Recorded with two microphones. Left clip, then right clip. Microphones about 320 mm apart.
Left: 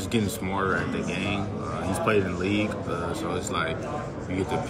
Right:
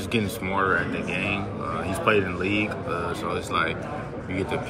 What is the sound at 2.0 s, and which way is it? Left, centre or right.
Speech, centre.